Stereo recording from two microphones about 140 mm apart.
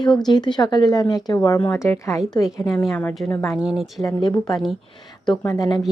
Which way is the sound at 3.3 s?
20° left (ahead or behind).